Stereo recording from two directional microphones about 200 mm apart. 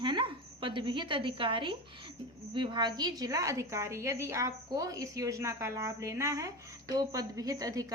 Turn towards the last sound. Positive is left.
turn(degrees=-20)  # may be behind; listen again after turning